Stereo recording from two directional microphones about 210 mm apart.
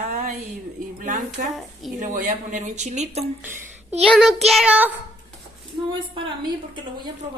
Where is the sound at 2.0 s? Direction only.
35° right (ahead or behind).